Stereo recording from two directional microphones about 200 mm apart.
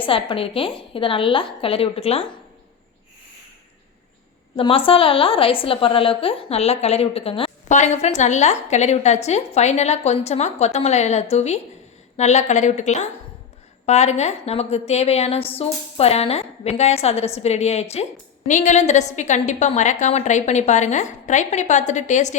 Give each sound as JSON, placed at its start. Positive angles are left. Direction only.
{"t": 0.0, "sound": "a woman's voice", "side_deg": 25}
{"t": 4.5, "sound": "a woman's voice", "side_deg": 25}